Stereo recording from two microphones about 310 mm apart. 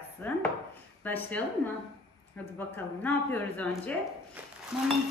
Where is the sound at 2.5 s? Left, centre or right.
Centre.